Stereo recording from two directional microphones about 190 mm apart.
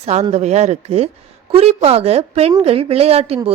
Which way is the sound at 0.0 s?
35° right (ahead or behind).